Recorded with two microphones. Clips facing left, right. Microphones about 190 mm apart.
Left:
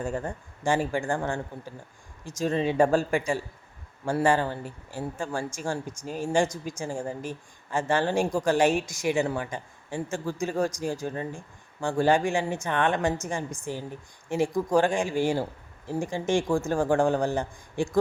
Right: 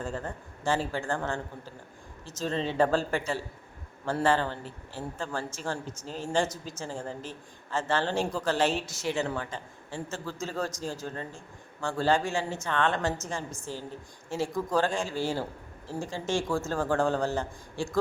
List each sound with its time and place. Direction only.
0.0 s a woman's voice: 15° left (ahead or behind)